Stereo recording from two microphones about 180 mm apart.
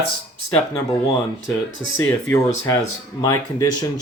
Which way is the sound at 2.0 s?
10° left (ahead or behind).